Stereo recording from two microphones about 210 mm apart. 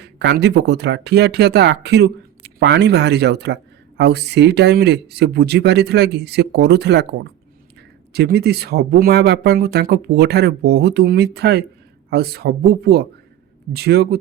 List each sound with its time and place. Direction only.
0.0 s speech: 55° right (ahead or behind)